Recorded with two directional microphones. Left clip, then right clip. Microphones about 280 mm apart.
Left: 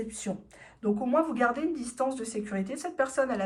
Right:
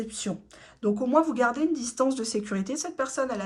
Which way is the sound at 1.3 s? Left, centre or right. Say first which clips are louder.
Right 3 dB; centre.